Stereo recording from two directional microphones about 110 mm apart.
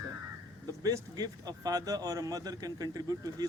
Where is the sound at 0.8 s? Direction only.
35° right (ahead or behind).